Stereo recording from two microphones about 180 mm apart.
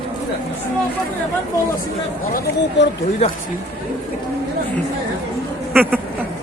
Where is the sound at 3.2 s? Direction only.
35° left (ahead or behind).